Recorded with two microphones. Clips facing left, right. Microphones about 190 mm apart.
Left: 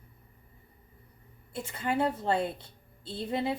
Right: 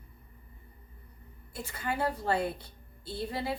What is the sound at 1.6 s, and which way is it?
A woman's voice, 25° left (ahead or behind).